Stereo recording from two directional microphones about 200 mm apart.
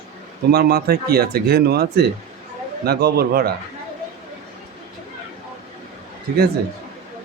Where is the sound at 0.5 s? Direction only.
50° right (ahead or behind).